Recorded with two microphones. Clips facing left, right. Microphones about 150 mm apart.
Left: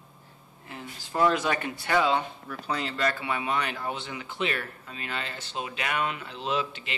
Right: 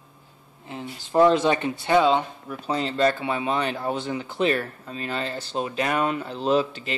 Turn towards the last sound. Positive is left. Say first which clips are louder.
# right 8 dB
turn(degrees=-40)  # may be behind; listen again after turning